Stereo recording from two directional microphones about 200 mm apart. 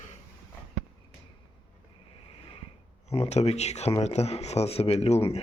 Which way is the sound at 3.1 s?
30° left (ahead or behind).